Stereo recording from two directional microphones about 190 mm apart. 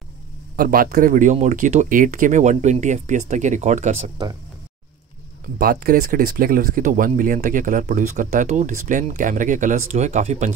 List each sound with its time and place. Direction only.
0.6 s speech: 50° right (ahead or behind)
5.6 s speech: 50° right (ahead or behind)